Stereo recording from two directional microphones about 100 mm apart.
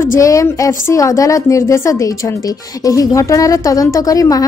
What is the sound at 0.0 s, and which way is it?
A woman's voice, 30° left (ahead or behind).